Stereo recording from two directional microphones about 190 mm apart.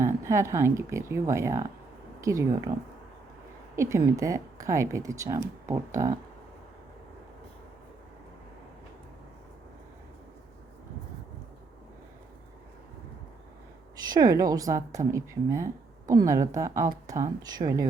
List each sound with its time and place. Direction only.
0.0 s a woman's voice: 15° right (ahead or behind)
3.8 s a woman's voice: 15° right (ahead or behind)
14.1 s a woman's voice: 20° right (ahead or behind)